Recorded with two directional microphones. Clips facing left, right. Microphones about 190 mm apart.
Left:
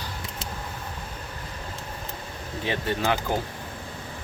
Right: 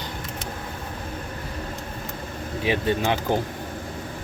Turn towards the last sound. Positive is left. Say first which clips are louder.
# right 3 dB
turn(degrees=-20)  # may be behind; listen again after turning